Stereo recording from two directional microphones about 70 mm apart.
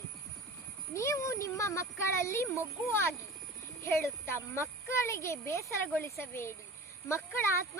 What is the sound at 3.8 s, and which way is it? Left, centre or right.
A child's voice, left.